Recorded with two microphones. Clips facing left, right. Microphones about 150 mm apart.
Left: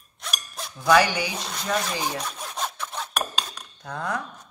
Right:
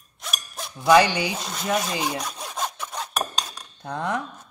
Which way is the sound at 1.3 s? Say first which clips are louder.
Right 2 dB; 15° right (ahead or behind).